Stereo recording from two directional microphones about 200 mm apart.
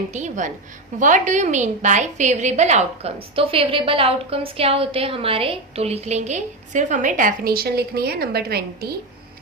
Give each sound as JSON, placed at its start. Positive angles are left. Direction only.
{"t": 0.1, "sound": "a woman's voice", "side_deg": -35}